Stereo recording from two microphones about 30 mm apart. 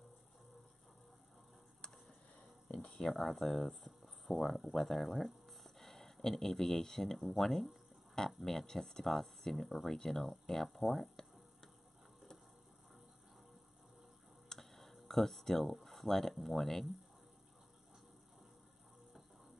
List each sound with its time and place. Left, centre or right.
2.7 s a sound: left
3.0 s speech: centre
3.3 s speech: centre
8.6 s speech: centre
14.6 s tick-tock: centre
15.7 s speech: centre